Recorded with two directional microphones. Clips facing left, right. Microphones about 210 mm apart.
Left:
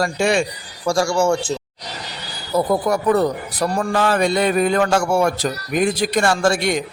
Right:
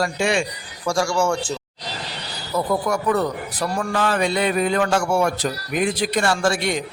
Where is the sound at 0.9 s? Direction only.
30° left (ahead or behind).